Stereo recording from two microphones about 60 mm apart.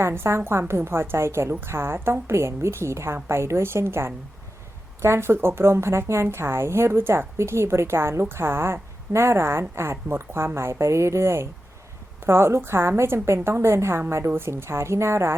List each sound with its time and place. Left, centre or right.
0.0 s a woman's voice: right